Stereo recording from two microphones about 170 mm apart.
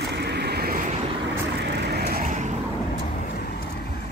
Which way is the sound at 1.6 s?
75° right (ahead or behind).